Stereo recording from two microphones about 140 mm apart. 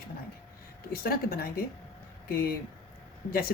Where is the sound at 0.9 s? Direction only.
90° left.